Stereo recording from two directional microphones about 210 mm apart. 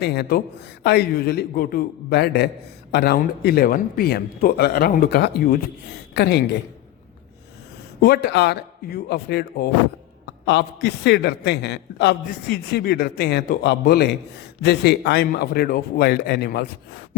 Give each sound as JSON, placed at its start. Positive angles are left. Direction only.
{"t": 0.0, "sound": "a man's voice", "side_deg": 50}
{"t": 8.0, "sound": "a man's voice", "side_deg": 50}